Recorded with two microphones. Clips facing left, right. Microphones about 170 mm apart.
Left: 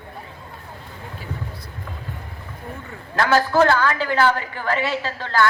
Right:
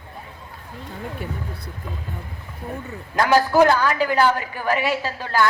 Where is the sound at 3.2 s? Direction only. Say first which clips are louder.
Right 1 dB; 15° right (ahead or behind).